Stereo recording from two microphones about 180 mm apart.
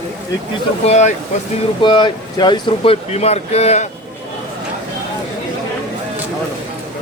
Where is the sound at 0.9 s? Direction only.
40° left (ahead or behind).